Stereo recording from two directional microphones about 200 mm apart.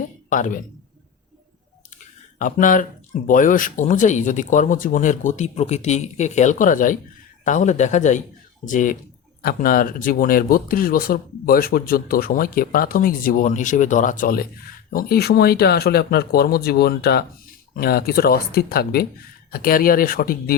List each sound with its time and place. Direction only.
0.3 s speech: 40° left (ahead or behind)
2.0 s speech: 40° left (ahead or behind)